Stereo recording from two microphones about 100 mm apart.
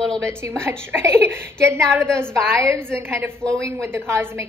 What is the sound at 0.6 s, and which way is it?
A woman's voice, 25° right (ahead or behind).